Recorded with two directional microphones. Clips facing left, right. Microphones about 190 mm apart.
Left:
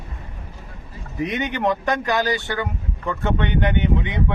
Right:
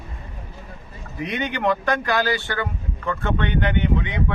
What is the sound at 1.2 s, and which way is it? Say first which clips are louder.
A man's voice: left 2 dB; 20° left (ahead or behind).